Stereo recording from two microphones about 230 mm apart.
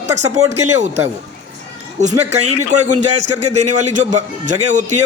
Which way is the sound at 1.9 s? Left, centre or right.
Right.